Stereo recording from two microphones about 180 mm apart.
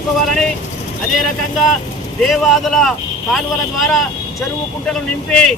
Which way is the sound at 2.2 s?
Centre (ahead or behind).